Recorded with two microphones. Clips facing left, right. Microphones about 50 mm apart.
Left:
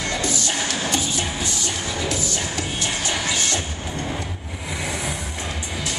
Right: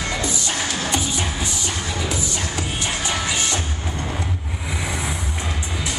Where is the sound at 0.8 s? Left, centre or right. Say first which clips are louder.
Right 1 dB; right.